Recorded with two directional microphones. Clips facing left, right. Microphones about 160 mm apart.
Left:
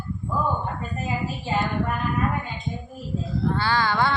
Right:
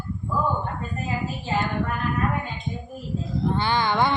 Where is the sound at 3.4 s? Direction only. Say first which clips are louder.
Even; 20° right (ahead or behind).